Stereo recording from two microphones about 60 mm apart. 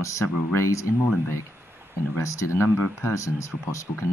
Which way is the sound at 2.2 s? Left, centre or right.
Left.